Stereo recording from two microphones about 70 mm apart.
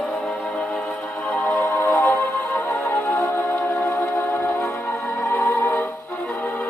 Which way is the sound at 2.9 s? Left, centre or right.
Left.